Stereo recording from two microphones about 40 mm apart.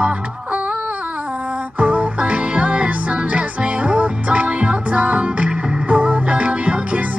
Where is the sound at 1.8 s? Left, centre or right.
Right.